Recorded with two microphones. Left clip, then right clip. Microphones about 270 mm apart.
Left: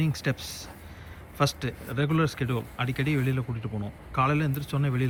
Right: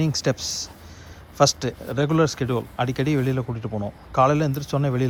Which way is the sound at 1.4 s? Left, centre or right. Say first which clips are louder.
Right 9 dB; centre.